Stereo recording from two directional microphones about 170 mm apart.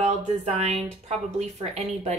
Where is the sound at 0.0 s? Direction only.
40° right (ahead or behind).